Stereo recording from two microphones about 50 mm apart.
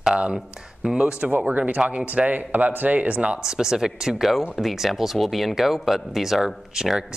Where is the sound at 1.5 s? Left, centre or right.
Right.